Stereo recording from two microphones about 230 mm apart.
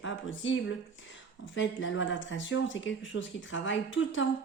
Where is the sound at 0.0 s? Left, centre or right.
Left.